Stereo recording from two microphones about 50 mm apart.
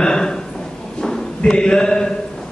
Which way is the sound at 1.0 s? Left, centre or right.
Centre.